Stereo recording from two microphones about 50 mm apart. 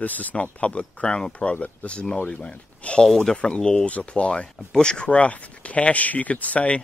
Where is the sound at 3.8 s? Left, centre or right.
Left.